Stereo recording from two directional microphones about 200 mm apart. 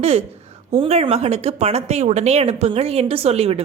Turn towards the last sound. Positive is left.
turn(degrees=-30)  # may be behind; listen again after turning